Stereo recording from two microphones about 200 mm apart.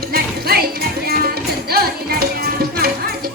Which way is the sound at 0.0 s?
50° right (ahead or behind).